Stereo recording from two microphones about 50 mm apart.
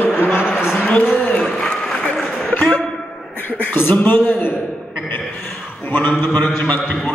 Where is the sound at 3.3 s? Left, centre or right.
Left.